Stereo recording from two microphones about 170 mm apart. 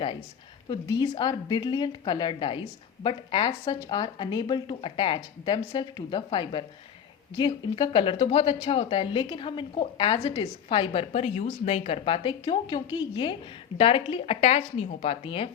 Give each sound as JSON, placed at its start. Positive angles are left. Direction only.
{"t": 0.7, "sound": "a woman's voice", "side_deg": 25}